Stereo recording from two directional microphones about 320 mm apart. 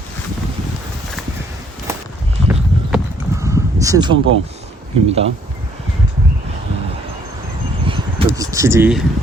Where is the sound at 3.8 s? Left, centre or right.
Centre.